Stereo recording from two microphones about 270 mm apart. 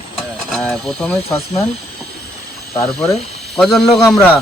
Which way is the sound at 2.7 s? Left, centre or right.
Centre.